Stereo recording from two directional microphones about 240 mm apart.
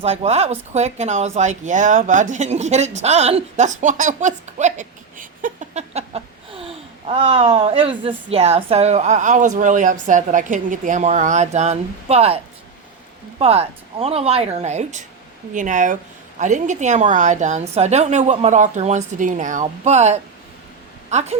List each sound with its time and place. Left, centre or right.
0.0 s speech: right
13.4 s a woman's voice: right